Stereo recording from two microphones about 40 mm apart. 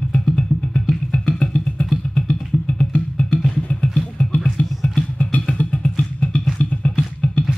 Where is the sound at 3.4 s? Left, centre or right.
Left.